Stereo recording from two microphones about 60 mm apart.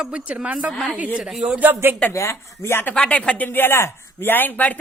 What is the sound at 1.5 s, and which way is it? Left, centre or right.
Speech, right.